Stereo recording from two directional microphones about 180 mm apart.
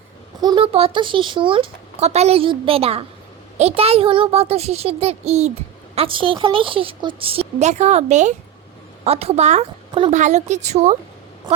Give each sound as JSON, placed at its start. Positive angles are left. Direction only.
{"t": 0.4, "sound": "speech", "side_deg": -30}